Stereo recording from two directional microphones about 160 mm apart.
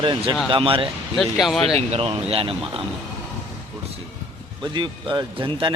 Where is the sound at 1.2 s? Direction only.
Centre (ahead or behind).